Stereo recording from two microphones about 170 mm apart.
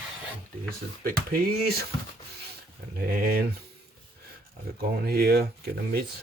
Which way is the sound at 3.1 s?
60° right (ahead or behind).